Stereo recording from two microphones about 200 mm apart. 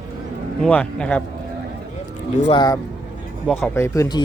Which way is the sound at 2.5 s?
20° left (ahead or behind).